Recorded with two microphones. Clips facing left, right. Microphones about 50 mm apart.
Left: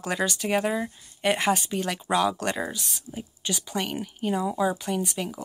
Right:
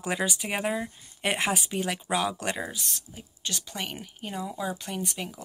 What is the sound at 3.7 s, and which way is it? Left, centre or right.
Speech, centre.